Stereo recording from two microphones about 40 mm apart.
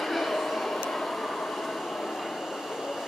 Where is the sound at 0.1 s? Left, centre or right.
Centre.